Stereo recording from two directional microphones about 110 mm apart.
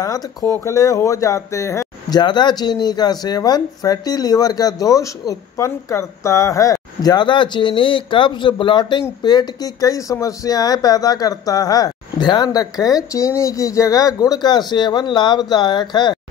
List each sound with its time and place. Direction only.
0.0 s speech: 35° left (ahead or behind)
2.0 s speech: 40° left (ahead or behind)